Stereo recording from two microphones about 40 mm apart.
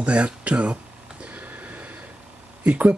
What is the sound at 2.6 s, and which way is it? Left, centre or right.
Speech, right.